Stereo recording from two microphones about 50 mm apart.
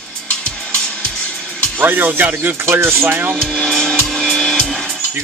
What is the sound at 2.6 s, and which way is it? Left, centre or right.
Speech, right.